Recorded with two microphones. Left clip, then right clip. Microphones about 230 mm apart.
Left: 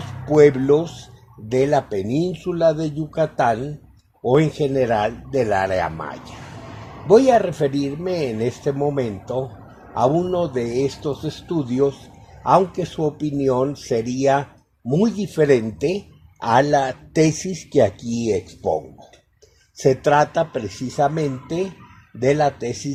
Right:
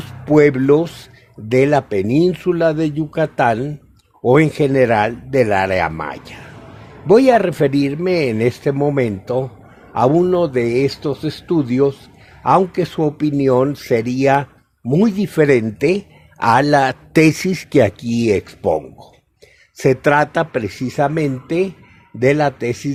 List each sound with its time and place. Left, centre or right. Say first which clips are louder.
0.0 s a man's voice: right 1 dB; right